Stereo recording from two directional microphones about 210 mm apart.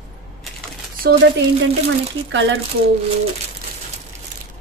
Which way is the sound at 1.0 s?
50° right (ahead or behind).